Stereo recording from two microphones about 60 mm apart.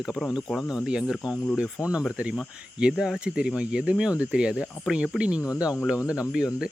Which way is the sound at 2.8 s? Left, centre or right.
Centre.